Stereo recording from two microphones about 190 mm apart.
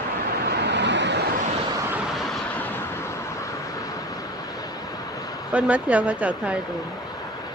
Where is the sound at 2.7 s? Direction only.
15° left (ahead or behind).